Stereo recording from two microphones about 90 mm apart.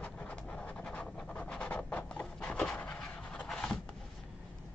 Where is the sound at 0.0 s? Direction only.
15° left (ahead or behind).